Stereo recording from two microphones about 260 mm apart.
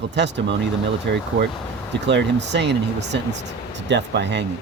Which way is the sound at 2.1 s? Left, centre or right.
Right.